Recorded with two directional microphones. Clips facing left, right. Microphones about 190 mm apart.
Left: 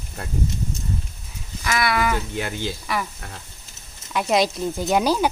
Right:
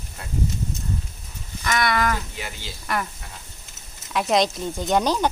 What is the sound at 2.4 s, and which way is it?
Speech, 55° left (ahead or behind).